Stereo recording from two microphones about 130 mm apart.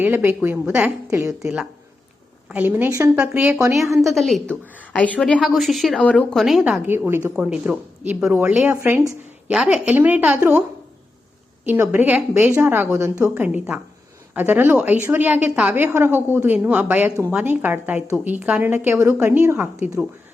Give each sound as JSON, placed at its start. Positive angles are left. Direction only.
{"t": 0.0, "sound": "a woman's voice", "side_deg": -15}
{"t": 2.5, "sound": "a woman's voice", "side_deg": -10}
{"t": 4.0, "sound": "a woman's voice", "side_deg": 0}
{"t": 4.6, "sound": "a woman's voice", "side_deg": 10}
{"t": 6.8, "sound": "a woman's voice", "side_deg": -15}
{"t": 11.7, "sound": "a woman's voice", "side_deg": -15}